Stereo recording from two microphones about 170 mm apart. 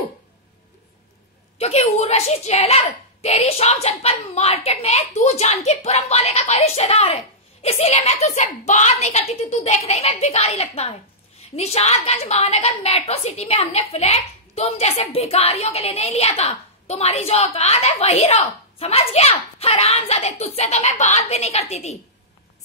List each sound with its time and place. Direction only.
1.6 s a woman's voice: 40° left (ahead or behind)